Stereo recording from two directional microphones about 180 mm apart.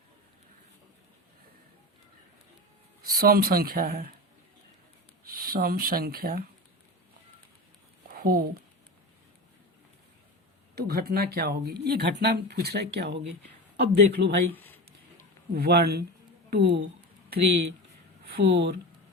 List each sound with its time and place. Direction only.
3.0 s speech: 55° right (ahead or behind)
5.2 s speech: 55° right (ahead or behind)
8.0 s a sound: 55° right (ahead or behind)
10.8 s speech: 60° right (ahead or behind)
14.5 s speech: 10° left (ahead or behind)
15.5 s a woman's voice: 60° right (ahead or behind)
18.3 s speech: 75° right (ahead or behind)